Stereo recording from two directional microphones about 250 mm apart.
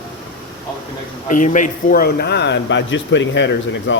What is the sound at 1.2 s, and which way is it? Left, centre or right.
Speech, left.